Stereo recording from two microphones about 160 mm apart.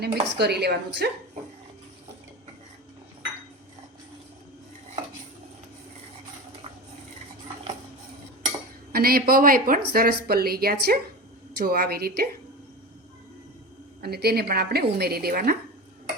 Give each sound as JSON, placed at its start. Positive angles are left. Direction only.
{"t": 0.0, "sound": "a woman's voice", "side_deg": -90}
{"t": 8.9, "sound": "speech", "side_deg": -70}
{"t": 14.0, "sound": "speech", "side_deg": -80}